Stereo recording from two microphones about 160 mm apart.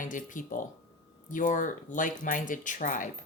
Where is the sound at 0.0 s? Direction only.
55° left (ahead or behind).